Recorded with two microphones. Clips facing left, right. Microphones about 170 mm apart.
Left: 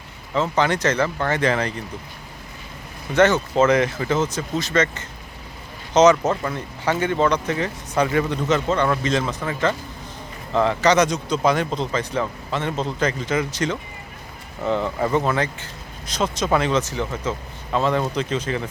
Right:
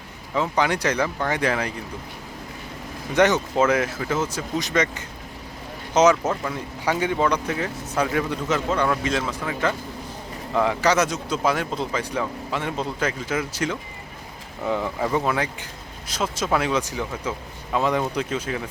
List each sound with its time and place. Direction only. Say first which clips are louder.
0.3 s speech: left 2 dB; 10° right (ahead or behind)
3.2 s speech: left 2 dB; 15° right (ahead or behind)